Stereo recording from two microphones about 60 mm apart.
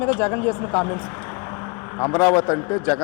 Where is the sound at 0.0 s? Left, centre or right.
Left.